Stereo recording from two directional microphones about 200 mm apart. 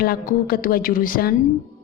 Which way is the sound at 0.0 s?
50° left (ahead or behind).